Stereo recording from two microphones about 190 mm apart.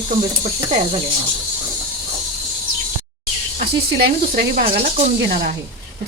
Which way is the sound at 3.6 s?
55° right (ahead or behind).